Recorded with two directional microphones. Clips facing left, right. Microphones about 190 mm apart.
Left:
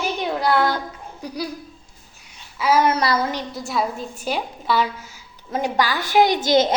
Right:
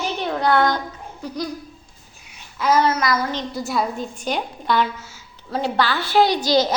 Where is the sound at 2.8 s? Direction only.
30° left (ahead or behind).